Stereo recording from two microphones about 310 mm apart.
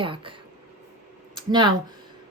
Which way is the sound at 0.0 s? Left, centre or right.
Centre.